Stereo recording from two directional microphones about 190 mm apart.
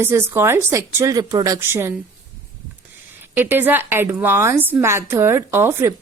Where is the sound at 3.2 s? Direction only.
10° right (ahead or behind).